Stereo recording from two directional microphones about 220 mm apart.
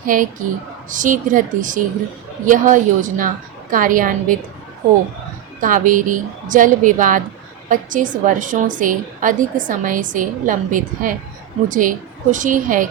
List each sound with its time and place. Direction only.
0.0 s a woman's voice: 40° right (ahead or behind)
5.5 s a woman's voice: 35° right (ahead or behind)